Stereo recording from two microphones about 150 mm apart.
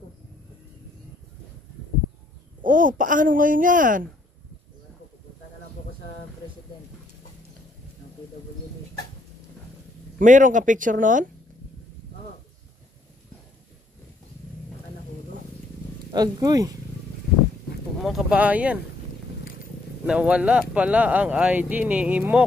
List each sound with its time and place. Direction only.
2.6 s speech: 65° right (ahead or behind)
10.1 s speech: 60° right (ahead or behind)
16.1 s speech: 25° right (ahead or behind)
17.9 s speech: centre (ahead or behind)
20.1 s speech: 10° right (ahead or behind)